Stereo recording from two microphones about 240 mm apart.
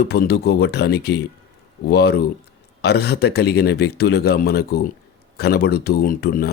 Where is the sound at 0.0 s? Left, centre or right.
Left.